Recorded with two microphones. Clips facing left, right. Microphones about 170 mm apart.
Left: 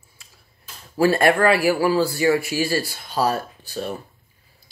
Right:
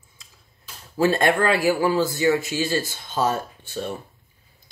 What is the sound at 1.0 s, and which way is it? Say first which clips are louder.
Speech: left 3 dB; 20° right (ahead or behind).